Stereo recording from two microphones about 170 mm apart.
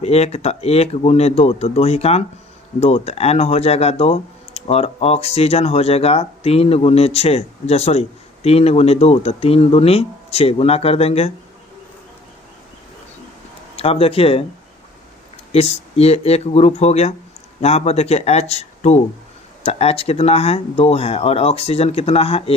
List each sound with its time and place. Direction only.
0.0 s speech: 40° left (ahead or behind)
13.7 s speech: 35° left (ahead or behind)
15.5 s speech: 35° left (ahead or behind)